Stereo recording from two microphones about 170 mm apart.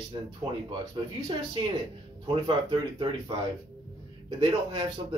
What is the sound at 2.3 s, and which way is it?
Speech, 30° right (ahead or behind).